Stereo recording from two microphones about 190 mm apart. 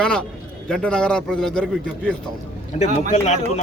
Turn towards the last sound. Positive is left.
turn(degrees=35)  # may be behind; listen again after turning